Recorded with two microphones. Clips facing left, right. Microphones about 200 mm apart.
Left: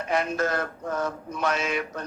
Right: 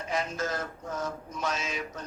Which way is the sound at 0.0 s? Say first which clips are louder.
Left 6 dB; 60° left (ahead or behind).